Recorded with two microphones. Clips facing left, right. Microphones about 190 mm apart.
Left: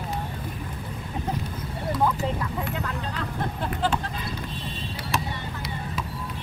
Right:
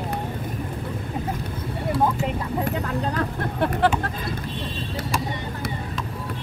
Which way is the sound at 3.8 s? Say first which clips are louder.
Right 4 dB; 65° right (ahead or behind).